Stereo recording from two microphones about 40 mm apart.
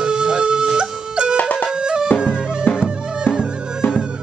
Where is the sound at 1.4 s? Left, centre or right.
Left.